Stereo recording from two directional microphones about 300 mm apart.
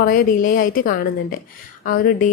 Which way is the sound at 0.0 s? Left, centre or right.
Left.